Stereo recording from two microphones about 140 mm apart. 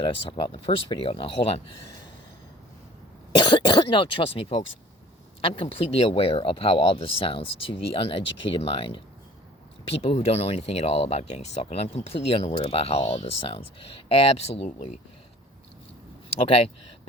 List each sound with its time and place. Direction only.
0.0 s speech: 40° left (ahead or behind)
3.3 s speech: 35° left (ahead or behind)
16.4 s speech: 45° left (ahead or behind)